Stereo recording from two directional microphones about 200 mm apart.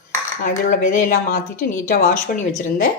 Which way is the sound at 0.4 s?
40° left (ahead or behind).